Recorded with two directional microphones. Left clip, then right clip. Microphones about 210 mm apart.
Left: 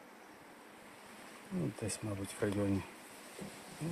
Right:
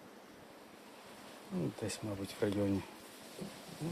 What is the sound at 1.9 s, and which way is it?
Speech, centre (ahead or behind).